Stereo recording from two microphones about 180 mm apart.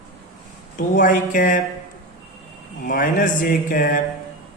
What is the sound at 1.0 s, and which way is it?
Speech, 50° left (ahead or behind).